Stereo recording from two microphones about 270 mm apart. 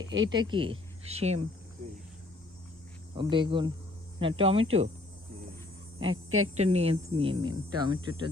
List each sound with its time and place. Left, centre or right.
0.0 s speech: right
0.3 s speech: centre
3.2 s speech: centre
6.6 s speech: right